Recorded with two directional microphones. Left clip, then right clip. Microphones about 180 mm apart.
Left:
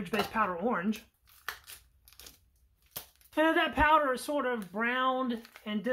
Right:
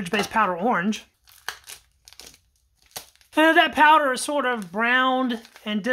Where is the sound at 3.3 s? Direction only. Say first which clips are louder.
Right 10 dB; 35° right (ahead or behind).